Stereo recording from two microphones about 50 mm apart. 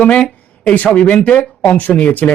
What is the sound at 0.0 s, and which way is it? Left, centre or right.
Speech, left.